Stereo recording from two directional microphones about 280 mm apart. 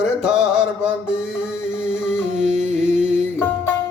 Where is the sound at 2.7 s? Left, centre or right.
Right.